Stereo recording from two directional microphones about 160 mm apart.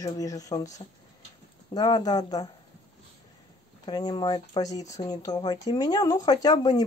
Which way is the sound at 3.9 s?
25° left (ahead or behind).